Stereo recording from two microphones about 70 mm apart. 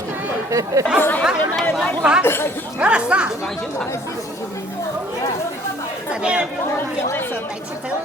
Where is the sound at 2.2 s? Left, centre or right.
Left.